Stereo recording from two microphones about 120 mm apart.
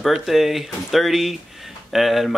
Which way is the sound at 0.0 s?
Centre (ahead or behind).